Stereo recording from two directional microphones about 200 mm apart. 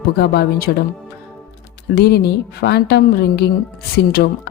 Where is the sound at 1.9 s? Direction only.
55° left (ahead or behind).